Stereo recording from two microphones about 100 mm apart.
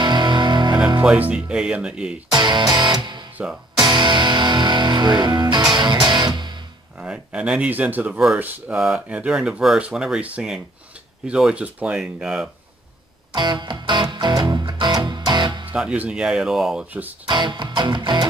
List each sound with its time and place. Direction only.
0.0 s music: 50° right (ahead or behind)
1.1 s speech: 15° right (ahead or behind)
2.3 s music: 50° right (ahead or behind)
7.0 s speech: 10° right (ahead or behind)
8.7 s speech: 5° right (ahead or behind)
13.3 s music: 50° right (ahead or behind)
15.7 s speech: 10° right (ahead or behind)
17.3 s music: 50° right (ahead or behind)